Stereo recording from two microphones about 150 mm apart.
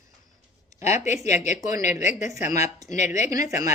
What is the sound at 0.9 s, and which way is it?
Speech, 50° left (ahead or behind).